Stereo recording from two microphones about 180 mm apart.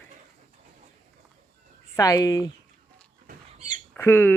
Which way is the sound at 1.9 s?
20° left (ahead or behind).